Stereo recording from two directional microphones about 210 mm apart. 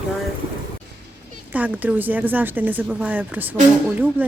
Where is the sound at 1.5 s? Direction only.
5° right (ahead or behind).